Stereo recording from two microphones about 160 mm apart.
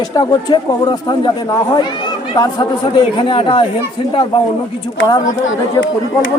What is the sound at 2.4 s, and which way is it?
Speech, 30° left (ahead or behind).